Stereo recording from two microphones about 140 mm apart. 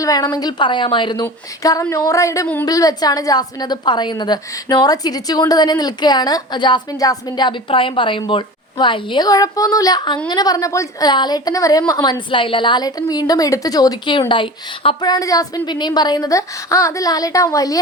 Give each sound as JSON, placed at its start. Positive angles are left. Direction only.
{"t": 0.0, "sound": "a woman's voice", "side_deg": 25}
{"t": 12.3, "sound": "a woman's voice", "side_deg": 35}